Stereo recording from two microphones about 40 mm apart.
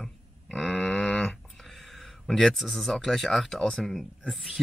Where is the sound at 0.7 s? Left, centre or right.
Centre.